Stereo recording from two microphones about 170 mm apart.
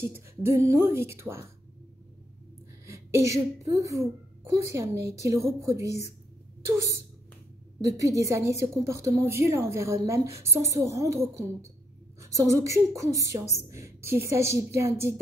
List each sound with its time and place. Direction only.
0.0 s speech: 15° right (ahead or behind)
2.9 s a woman's voice: 20° right (ahead or behind)